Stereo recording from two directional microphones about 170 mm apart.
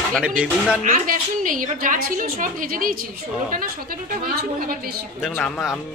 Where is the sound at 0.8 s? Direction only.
55° right (ahead or behind).